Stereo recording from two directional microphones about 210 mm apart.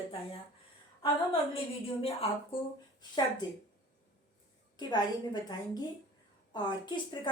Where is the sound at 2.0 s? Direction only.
25° left (ahead or behind).